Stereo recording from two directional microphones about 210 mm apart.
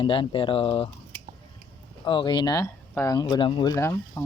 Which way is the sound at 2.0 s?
25° left (ahead or behind).